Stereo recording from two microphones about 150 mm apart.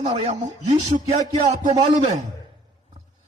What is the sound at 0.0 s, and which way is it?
Speech, 40° right (ahead or behind).